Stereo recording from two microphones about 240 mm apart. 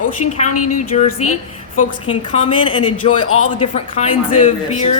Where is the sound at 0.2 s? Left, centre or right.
Left.